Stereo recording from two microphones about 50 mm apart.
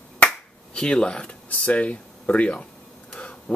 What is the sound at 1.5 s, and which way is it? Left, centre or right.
Speech, left.